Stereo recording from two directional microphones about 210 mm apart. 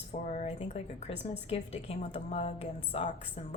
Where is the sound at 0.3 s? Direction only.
30° left (ahead or behind).